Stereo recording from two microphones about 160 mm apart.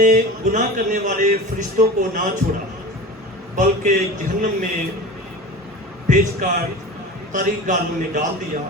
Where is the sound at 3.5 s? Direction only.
50° right (ahead or behind).